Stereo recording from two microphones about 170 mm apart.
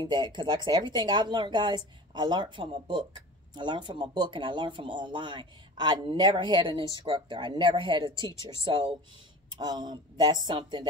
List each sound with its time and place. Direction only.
0.0 s speech: 25° right (ahead or behind)
9.5 s speech: 25° right (ahead or behind)